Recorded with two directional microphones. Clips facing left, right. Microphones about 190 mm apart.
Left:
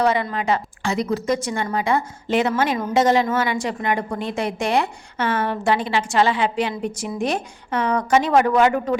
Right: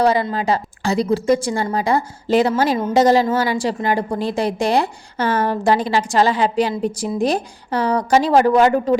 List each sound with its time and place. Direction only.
0.0 s a woman's voice: 35° right (ahead or behind)